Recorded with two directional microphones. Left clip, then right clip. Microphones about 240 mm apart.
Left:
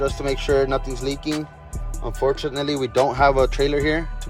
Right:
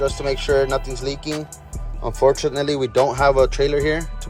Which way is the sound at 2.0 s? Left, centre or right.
Right.